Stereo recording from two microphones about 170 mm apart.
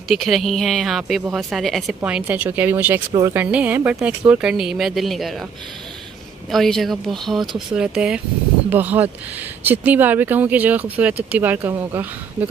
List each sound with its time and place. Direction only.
0.1 s speech: centre (ahead or behind)
3.1 s speech: 20° right (ahead or behind)
3.3 s speech: 10° right (ahead or behind)
6.5 s speech: centre (ahead or behind)